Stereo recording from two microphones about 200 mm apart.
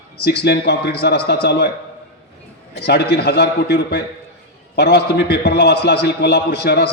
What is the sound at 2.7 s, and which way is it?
A man's voice, 55° left (ahead or behind).